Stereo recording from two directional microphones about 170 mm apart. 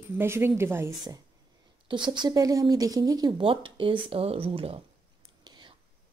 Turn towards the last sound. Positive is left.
turn(degrees=-25)  # may be behind; listen again after turning